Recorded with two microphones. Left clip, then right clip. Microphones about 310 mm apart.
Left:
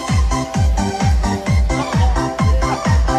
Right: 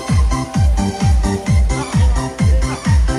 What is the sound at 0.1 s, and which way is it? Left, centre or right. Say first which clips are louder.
Music: right 1 dB; centre.